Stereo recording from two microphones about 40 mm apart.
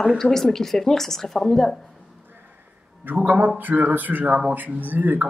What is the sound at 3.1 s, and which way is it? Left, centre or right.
Speech, right.